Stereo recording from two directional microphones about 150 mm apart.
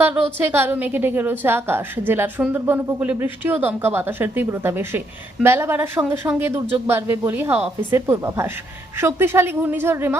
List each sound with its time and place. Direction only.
0.0 s a woman's voice: 15° right (ahead or behind)